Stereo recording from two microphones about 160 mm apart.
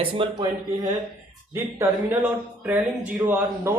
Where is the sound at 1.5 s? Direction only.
15° right (ahead or behind).